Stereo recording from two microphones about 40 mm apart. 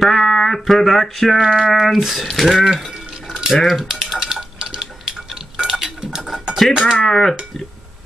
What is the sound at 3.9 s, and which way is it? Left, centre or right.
Typing, centre.